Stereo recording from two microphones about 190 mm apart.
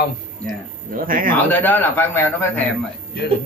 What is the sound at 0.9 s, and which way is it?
Speech, 45° right (ahead or behind).